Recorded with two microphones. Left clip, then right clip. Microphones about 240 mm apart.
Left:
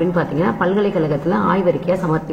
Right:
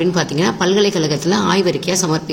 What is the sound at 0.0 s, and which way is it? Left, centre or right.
A woman's voice, right.